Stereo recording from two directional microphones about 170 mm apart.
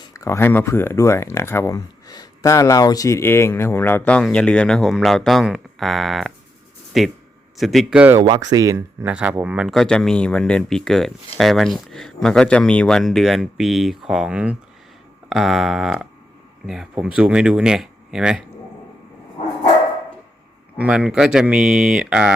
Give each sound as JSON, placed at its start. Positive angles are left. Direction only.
{"t": 0.0, "sound": "speech", "side_deg": 20}
{"t": 8.2, "sound": "speech", "side_deg": -25}
{"t": 9.0, "sound": "speech", "side_deg": -5}
{"t": 20.7, "sound": "speech", "side_deg": -10}